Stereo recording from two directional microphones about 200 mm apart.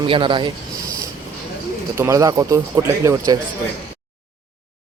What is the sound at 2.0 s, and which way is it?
Speech, 15° right (ahead or behind).